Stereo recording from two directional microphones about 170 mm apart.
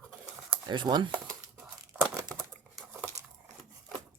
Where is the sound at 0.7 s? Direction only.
25° right (ahead or behind).